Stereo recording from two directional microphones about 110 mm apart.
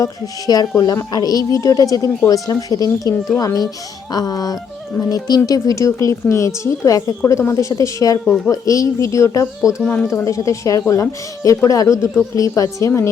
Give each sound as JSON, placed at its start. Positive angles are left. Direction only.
{"t": 0.0, "sound": "a woman's voice", "side_deg": 35}
{"t": 9.8, "sound": "speech", "side_deg": 10}
{"t": 10.1, "sound": "a woman's voice", "side_deg": 30}